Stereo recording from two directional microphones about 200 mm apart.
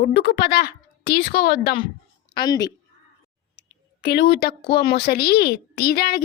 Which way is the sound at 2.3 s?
20° left (ahead or behind).